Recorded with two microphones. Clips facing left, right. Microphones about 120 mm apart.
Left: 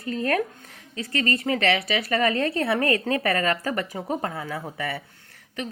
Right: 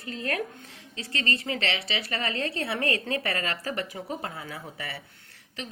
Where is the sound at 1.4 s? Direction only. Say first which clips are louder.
Left 8 dB; 45° left (ahead or behind).